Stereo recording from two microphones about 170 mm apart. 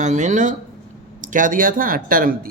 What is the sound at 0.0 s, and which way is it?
Speech, 45° right (ahead or behind).